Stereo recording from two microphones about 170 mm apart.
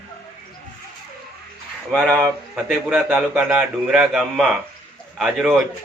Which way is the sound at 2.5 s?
5° right (ahead or behind).